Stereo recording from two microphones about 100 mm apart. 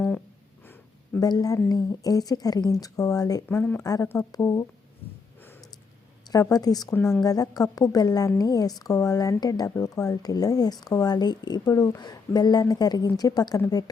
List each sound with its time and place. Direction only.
1.2 s speech: 40° left (ahead or behind)
6.3 s speech: 40° left (ahead or behind)